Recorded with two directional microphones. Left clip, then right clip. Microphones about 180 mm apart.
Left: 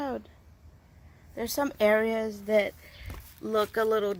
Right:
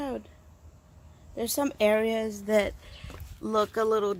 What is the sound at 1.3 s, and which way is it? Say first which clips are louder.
Speech: right 1 dB; 10° right (ahead or behind).